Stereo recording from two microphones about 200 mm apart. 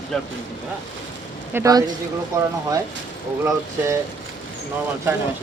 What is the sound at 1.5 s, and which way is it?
Speech, 15° right (ahead or behind).